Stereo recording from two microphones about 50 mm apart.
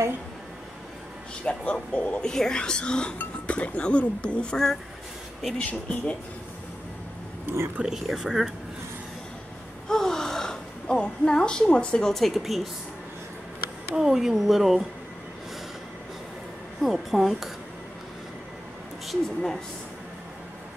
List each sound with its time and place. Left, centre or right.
1.7 s speech: left
2.2 s speech: centre
5.6 s speech: left
7.4 s speech: right
7.8 s speech: centre
9.8 s a sound: centre
12.1 s speech: centre
13.9 s speech: centre
16.8 s speech: centre
19.0 s speech: centre